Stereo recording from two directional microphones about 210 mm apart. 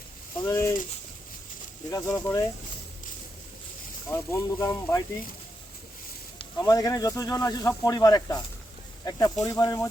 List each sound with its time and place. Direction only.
0.4 s speech: 15° left (ahead or behind)
1.9 s speech: 15° left (ahead or behind)
4.1 s speech: 15° left (ahead or behind)
6.4 s speech: 15° left (ahead or behind)